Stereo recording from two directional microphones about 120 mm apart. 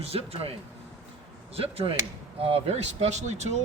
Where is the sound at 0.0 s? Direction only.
55° right (ahead or behind).